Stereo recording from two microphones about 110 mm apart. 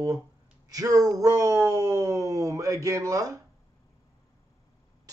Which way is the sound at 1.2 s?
30° right (ahead or behind).